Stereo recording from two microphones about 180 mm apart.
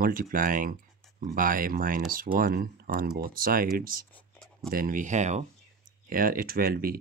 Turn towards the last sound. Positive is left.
turn(degrees=-55)  # may be behind; listen again after turning